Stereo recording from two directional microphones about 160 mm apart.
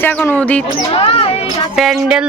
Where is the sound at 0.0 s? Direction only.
10° left (ahead or behind).